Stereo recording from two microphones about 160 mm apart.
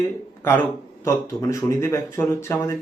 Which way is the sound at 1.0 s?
15° left (ahead or behind).